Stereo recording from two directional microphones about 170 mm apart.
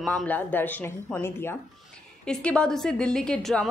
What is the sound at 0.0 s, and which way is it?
A woman's voice, 10° left (ahead or behind).